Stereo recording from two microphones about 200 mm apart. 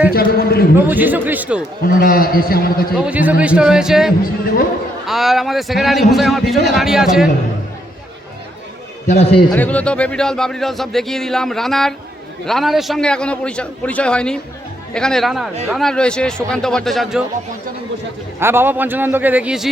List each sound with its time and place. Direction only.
0.1 s a man's voice: 50° left (ahead or behind)
0.9 s a man's voice: 10° right (ahead or behind)
1.8 s a man's voice: 45° left (ahead or behind)
2.9 s a man's voice: 5° right (ahead or behind)
9.0 s a man's voice: 30° left (ahead or behind)
9.5 s speech: 5° left (ahead or behind)
18.3 s a man's voice: 10° right (ahead or behind)